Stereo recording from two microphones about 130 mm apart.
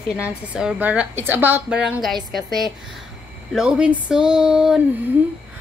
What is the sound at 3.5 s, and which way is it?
A woman's voice, 5° right (ahead or behind).